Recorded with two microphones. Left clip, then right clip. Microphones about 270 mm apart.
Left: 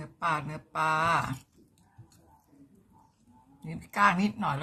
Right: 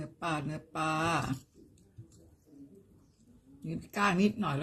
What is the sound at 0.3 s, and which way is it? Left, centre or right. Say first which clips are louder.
Speech: left 6 dB; left.